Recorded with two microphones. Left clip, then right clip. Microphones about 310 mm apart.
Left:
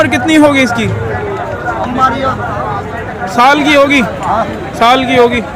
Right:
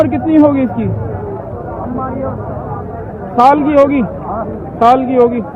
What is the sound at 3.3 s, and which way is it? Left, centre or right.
Speech, left.